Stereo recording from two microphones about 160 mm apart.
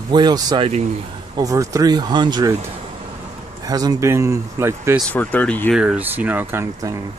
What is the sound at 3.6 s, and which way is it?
Speech, 25° right (ahead or behind).